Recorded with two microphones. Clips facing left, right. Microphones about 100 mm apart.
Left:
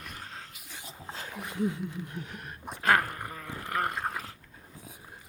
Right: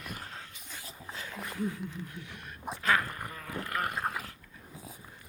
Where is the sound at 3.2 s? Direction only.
30° left (ahead or behind).